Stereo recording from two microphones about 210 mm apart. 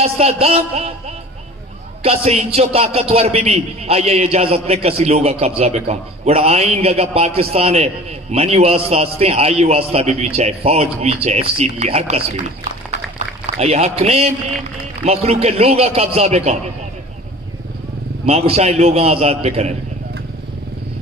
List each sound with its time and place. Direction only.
0.0 s a man's voice: 30° right (ahead or behind)
13.2 s a sound: 35° right (ahead or behind)
13.6 s a man's voice: 30° right (ahead or behind)
18.2 s a man's voice: 30° right (ahead or behind)